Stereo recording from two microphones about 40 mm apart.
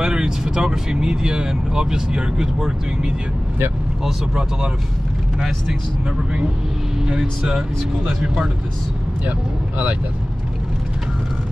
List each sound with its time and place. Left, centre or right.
0.0 s speech: centre
7.1 s speech: centre